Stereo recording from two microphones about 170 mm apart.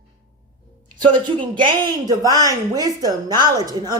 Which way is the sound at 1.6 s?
25° right (ahead or behind).